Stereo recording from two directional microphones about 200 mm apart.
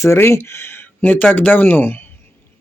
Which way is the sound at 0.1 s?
15° left (ahead or behind).